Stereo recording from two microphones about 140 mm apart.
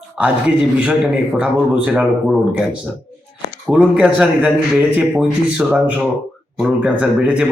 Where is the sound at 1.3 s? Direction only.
10° right (ahead or behind).